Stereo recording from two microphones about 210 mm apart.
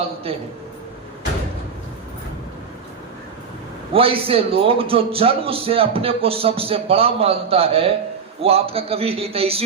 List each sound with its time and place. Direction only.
0.3 s a man's voice: 25° right (ahead or behind)
3.9 s a man's voice: 25° right (ahead or behind)